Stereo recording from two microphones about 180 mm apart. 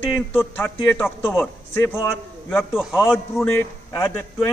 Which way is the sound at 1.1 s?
5° right (ahead or behind).